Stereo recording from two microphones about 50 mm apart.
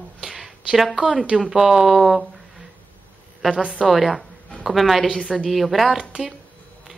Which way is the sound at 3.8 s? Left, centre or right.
Centre.